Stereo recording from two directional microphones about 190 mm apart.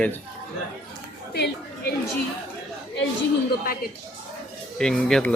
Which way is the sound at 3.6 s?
50° left (ahead or behind).